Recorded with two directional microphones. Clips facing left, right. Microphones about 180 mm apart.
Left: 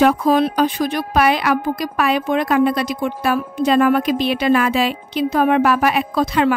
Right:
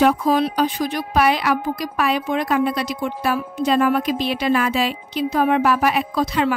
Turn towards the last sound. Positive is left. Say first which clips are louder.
# left 3 dB
turn(degrees=60)  # may be behind; listen again after turning